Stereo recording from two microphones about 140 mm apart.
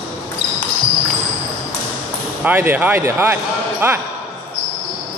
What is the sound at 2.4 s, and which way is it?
Speech, 15° right (ahead or behind).